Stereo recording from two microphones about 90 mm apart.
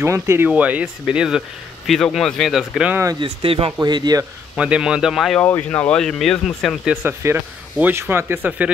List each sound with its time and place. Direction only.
0.0 s speech: 30° right (ahead or behind)
0.5 s speech: 15° right (ahead or behind)
1.9 s speech: 5° left (ahead or behind)
3.2 s speech: 90° right
3.8 s speech: 50° right (ahead or behind)
4.6 s speech: 10° right (ahead or behind)
5.4 s speech: 20° left (ahead or behind)
5.9 s speech: 5° left (ahead or behind)
6.9 s speech: 20° right (ahead or behind)